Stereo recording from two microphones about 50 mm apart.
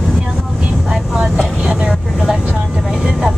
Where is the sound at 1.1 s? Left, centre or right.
Centre.